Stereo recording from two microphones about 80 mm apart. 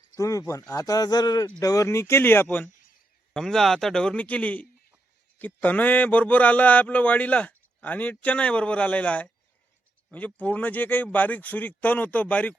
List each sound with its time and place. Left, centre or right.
0.2 s speech: left
3.3 s a man's voice: centre